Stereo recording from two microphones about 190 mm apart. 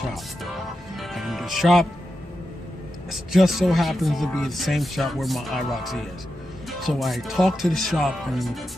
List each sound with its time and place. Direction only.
0.9 s music: centre (ahead or behind)
3.1 s speech: centre (ahead or behind)